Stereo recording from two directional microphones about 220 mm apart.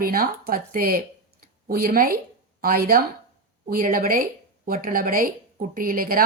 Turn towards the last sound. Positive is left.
turn(degrees=-40)  # may be behind; listen again after turning